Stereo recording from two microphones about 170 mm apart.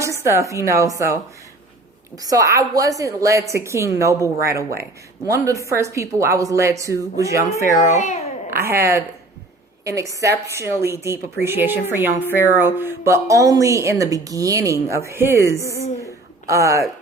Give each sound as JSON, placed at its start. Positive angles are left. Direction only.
{"t": 0.0, "sound": "a woman's voice", "side_deg": -15}
{"t": 2.2, "sound": "a woman's voice", "side_deg": -20}
{"t": 7.8, "sound": "a child's voice", "side_deg": 45}
{"t": 8.5, "sound": "a woman's voice", "side_deg": -15}